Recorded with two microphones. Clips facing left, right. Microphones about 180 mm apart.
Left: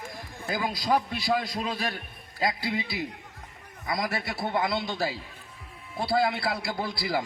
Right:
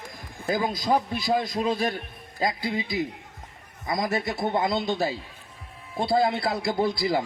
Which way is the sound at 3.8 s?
25° right (ahead or behind).